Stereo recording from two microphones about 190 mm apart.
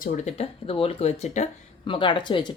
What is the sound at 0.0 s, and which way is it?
Speech, 35° left (ahead or behind).